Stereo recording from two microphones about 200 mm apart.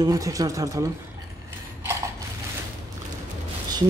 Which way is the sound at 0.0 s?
15° right (ahead or behind).